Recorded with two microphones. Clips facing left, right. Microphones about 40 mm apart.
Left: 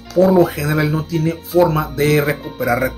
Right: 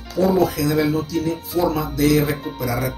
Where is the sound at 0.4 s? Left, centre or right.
Left.